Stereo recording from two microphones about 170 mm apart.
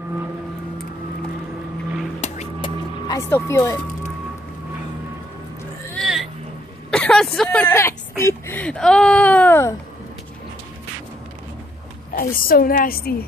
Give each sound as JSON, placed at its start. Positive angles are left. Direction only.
{"t": 2.2, "sound": "music", "side_deg": 40}
{"t": 2.6, "sound": "music", "side_deg": 20}
{"t": 5.9, "sound": "vehicle", "side_deg": 0}
{"t": 6.9, "sound": "speech", "side_deg": 5}
{"t": 12.2, "sound": "a woman's voice", "side_deg": 60}